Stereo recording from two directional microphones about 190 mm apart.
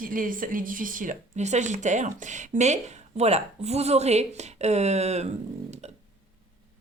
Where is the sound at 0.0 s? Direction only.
45° right (ahead or behind).